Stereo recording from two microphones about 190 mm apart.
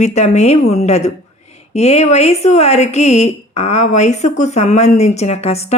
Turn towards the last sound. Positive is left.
turn(degrees=35)  # may be behind; listen again after turning